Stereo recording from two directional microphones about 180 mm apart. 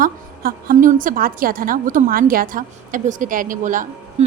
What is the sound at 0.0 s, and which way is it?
A woman's voice, 50° right (ahead or behind).